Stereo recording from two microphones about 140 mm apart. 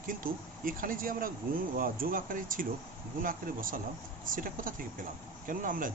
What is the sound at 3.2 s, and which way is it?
Speech, 85° right.